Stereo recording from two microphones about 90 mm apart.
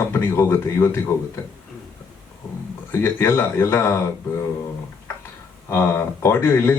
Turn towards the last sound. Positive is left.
turn(degrees=25)  # may be behind; listen again after turning